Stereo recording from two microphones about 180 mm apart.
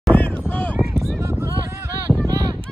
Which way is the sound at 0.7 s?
5° right (ahead or behind).